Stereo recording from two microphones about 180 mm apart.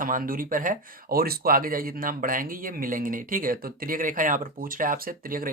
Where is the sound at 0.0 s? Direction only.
50° right (ahead or behind).